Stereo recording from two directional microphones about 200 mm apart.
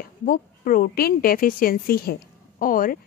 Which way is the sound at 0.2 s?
45° left (ahead or behind).